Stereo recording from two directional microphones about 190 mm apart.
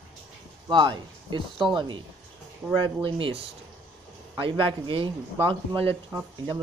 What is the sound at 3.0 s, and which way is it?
Speech, 25° right (ahead or behind).